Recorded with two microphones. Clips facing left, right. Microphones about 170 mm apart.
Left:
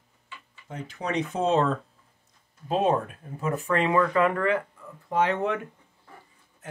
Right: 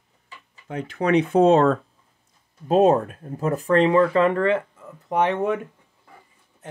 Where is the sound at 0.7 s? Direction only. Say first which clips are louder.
Right 10 dB; 65° right (ahead or behind).